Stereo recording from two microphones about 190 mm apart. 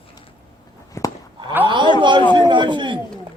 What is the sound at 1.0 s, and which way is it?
Cattle, 15° left (ahead or behind).